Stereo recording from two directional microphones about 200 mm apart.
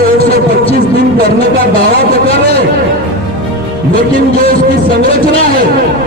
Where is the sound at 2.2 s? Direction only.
30° left (ahead or behind).